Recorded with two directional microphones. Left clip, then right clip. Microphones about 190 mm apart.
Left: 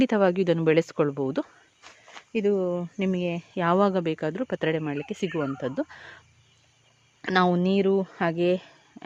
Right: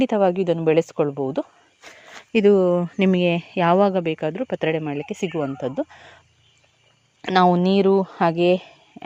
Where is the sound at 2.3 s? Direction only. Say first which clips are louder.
Right 9 dB; 35° right (ahead or behind).